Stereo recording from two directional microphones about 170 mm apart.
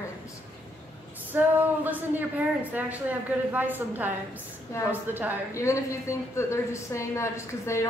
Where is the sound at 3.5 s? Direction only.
10° right (ahead or behind).